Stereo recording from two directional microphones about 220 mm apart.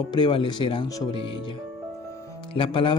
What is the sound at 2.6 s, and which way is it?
Speech, 20° left (ahead or behind).